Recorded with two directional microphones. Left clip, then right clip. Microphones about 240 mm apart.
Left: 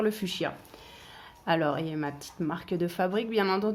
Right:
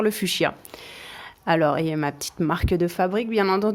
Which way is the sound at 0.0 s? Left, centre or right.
Right.